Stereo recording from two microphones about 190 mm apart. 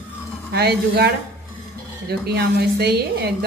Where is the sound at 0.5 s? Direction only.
60° right (ahead or behind).